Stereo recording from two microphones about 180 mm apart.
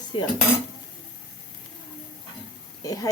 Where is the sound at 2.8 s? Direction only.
20° left (ahead or behind).